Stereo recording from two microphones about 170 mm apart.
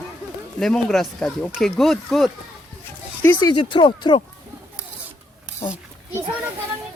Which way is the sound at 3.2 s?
15° left (ahead or behind).